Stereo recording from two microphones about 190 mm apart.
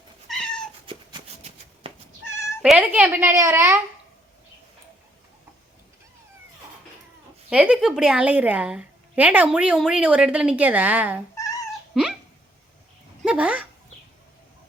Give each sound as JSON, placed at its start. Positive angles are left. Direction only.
{"t": 0.3, "sound": "cat", "side_deg": 5}
{"t": 0.9, "sound": "a sound", "side_deg": -30}
{"t": 2.6, "sound": "a woman's voice", "side_deg": -5}
{"t": 7.5, "sound": "a woman's voice", "side_deg": -5}
{"t": 11.3, "sound": "cat", "side_deg": 15}
{"t": 11.9, "sound": "dog", "side_deg": 0}
{"t": 13.2, "sound": "a woman's voice", "side_deg": -5}